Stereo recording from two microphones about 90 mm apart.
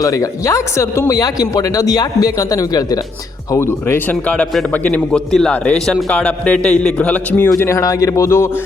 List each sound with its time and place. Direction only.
0.0 s speech: 40° left (ahead or behind)
3.5 s a man's voice: 30° left (ahead or behind)
5.1 s a man's voice: 5° left (ahead or behind); by 8.6 s 30° left (ahead or behind)